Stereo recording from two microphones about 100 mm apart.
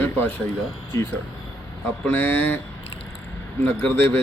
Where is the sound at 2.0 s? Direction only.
20° left (ahead or behind).